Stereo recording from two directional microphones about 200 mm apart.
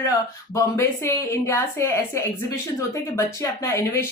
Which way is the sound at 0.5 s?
15° left (ahead or behind).